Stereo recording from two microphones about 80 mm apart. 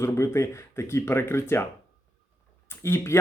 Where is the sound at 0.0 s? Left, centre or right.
Left.